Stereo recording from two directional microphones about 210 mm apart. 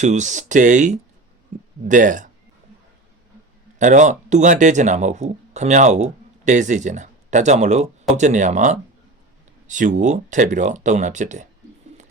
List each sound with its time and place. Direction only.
0.0 s speech: 35° right (ahead or behind)
3.8 s speech: 35° right (ahead or behind)